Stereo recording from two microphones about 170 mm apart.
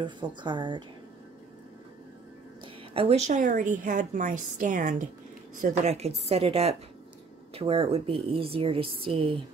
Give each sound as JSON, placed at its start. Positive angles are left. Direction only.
{"t": 0.0, "sound": "speech", "side_deg": -25}
{"t": 2.6, "sound": "a woman's voice", "side_deg": -35}